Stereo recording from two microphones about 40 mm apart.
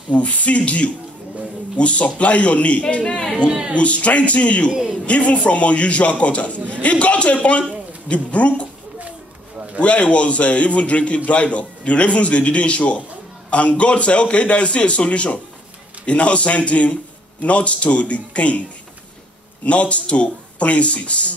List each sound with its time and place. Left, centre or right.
0.1 s a man's voice: left
9.8 s a man's voice: left
19.6 s a man's voice: left